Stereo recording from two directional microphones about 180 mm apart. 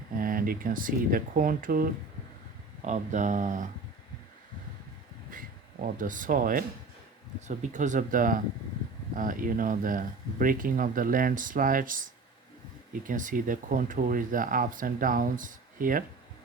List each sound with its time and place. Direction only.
0.2 s speech: 50° right (ahead or behind)
5.3 s speech: 50° right (ahead or behind)